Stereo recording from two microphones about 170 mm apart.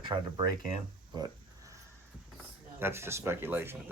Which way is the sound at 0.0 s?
25° right (ahead or behind).